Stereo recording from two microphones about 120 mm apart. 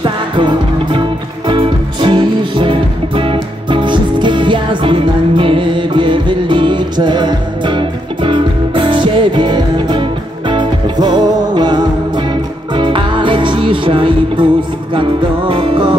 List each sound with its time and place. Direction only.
0.0 s music: 40° right (ahead or behind)